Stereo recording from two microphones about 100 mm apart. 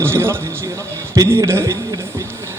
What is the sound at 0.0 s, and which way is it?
A man's voice, 25° right (ahead or behind).